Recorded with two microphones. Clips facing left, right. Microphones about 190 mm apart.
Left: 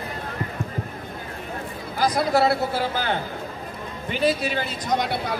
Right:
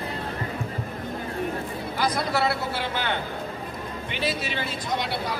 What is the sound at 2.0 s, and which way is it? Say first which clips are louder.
A man's voice: left 5 dB; 40° left (ahead or behind).